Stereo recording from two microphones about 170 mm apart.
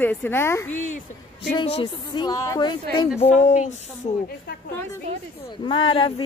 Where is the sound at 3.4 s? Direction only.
45° left (ahead or behind).